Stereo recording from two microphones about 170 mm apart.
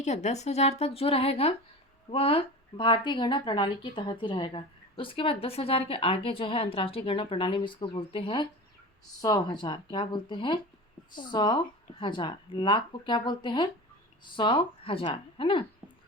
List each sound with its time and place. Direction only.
0.0 s a woman's voice: 40° left (ahead or behind)